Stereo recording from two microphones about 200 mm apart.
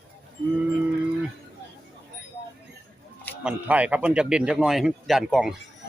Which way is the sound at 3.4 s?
5° right (ahead or behind).